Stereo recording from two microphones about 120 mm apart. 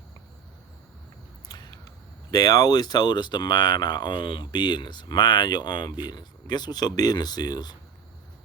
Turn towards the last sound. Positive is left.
turn(degrees=35)  # may be behind; listen again after turning